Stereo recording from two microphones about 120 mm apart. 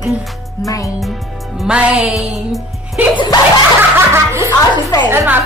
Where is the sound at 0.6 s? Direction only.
30° left (ahead or behind).